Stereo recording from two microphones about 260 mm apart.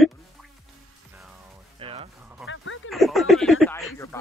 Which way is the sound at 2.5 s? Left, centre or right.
Left.